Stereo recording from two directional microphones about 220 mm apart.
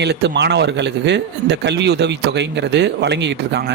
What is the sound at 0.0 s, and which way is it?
Speech, 50° right (ahead or behind).